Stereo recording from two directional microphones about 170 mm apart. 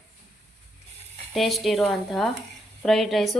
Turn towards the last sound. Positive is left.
turn(degrees=0)  # may be behind; listen again after turning